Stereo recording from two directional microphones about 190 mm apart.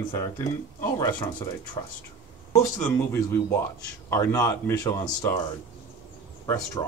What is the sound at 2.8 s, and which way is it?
Speech, 15° left (ahead or behind).